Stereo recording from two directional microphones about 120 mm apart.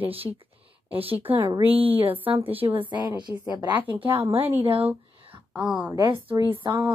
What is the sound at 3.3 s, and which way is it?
Speech, 30° left (ahead or behind).